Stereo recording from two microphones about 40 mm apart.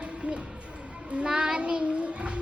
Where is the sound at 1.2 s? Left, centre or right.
Right.